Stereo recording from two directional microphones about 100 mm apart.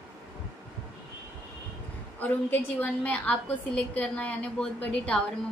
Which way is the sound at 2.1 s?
20° left (ahead or behind).